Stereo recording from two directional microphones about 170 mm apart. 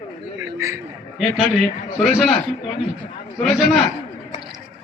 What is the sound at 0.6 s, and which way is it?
Speech, 15° right (ahead or behind).